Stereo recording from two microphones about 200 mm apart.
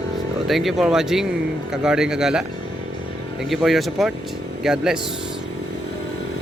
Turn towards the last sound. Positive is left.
turn(degrees=0)  # may be behind; listen again after turning